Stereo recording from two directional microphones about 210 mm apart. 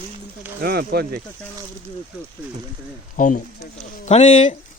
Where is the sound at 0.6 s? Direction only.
50° right (ahead or behind).